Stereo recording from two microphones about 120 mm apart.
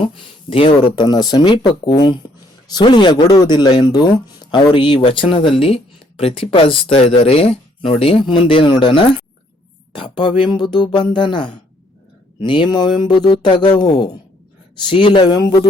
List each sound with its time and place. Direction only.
0.0 s speech: 45° left (ahead or behind)
1.0 s speech: 35° left (ahead or behind)